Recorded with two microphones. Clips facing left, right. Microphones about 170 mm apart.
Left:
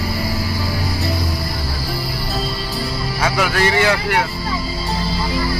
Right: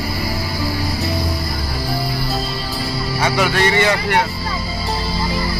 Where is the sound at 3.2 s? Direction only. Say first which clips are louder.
Right 1 dB; 5° left (ahead or behind).